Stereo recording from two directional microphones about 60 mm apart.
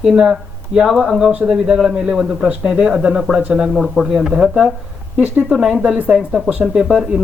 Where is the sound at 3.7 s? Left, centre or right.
Centre.